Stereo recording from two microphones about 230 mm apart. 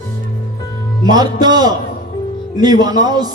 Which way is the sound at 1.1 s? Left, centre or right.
Centre.